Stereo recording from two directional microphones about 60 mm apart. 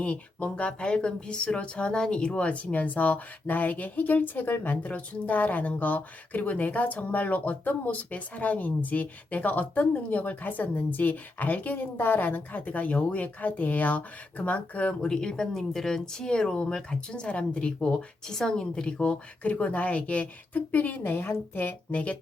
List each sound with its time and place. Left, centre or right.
0.0 s speech: left
21.9 s speech: left